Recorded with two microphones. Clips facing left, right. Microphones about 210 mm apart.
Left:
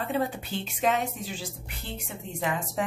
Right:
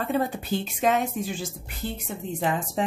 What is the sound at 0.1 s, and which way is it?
A woman's voice, 40° right (ahead or behind).